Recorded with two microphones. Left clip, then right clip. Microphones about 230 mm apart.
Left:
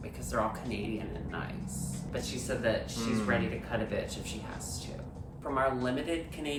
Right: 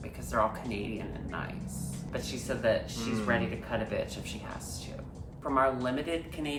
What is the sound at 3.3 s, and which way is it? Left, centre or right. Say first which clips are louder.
Speech: right 3 dB; centre.